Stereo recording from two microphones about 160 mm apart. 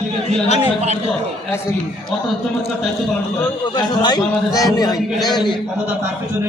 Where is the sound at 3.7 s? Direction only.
25° left (ahead or behind).